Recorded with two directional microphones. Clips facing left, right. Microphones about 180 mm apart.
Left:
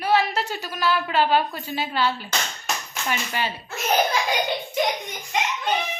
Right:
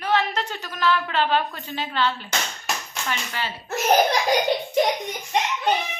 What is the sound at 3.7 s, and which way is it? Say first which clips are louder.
Laughter: right 4 dB; 40° right (ahead or behind).